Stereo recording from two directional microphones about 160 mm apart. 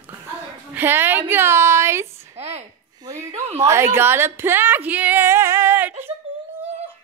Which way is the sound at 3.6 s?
15° right (ahead or behind).